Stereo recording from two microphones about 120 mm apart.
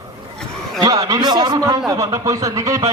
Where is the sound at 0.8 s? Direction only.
30° right (ahead or behind).